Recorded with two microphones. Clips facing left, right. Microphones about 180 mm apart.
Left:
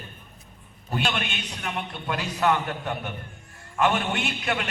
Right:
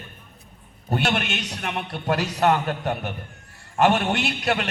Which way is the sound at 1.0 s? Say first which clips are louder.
Right 3 dB; 70° right (ahead or behind).